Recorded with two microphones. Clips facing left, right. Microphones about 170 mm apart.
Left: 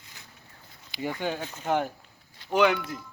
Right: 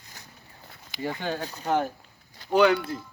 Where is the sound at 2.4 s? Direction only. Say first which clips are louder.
Right 3 dB; 40° right (ahead or behind).